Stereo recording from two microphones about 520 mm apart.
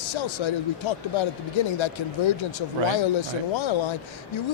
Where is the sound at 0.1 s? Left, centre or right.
Left.